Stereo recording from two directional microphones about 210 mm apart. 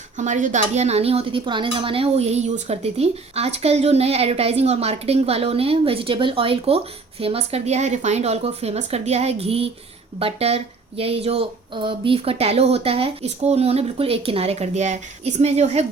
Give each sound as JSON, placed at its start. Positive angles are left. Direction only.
{"t": 0.2, "sound": "speech", "side_deg": -35}